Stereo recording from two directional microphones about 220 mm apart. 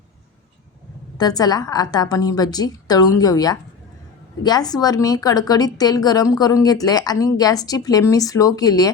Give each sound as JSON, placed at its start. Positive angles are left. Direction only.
{"t": 1.2, "sound": "a woman's voice", "side_deg": 15}